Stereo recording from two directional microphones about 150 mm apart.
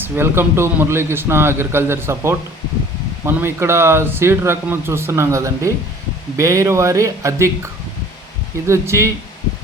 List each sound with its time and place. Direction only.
0.0 s speech: 15° right (ahead or behind)